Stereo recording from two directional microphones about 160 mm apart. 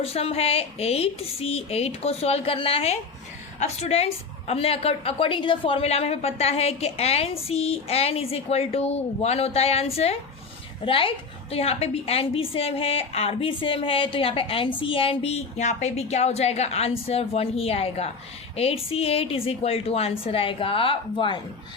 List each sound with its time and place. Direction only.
0.0 s a woman's voice: 40° left (ahead or behind)